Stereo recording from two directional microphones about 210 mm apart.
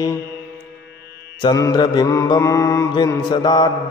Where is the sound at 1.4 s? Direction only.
20° left (ahead or behind).